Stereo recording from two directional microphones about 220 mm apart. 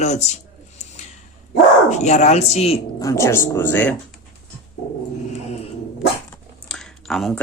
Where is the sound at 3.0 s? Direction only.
15° left (ahead or behind).